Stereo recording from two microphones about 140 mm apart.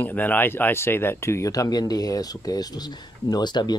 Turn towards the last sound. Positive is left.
turn(degrees=30)  # may be behind; listen again after turning